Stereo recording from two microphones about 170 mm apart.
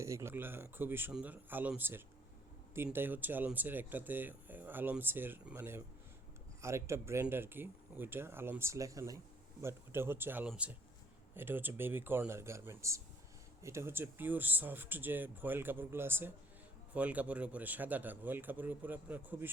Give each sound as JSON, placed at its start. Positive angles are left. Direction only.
{"t": 0.0, "sound": "speech", "side_deg": -15}